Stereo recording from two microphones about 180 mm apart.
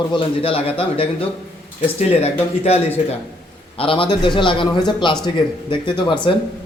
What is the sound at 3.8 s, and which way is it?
A man's voice, 30° left (ahead or behind).